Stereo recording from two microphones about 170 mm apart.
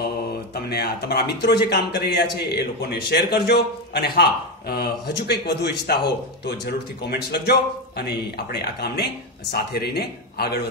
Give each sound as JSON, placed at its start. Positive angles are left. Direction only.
{"t": 0.7, "sound": "a man's voice", "side_deg": 70}
{"t": 7.1, "sound": "a man's voice", "side_deg": 70}